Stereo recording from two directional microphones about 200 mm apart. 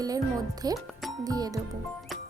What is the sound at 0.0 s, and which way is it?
A woman's voice, 20° right (ahead or behind).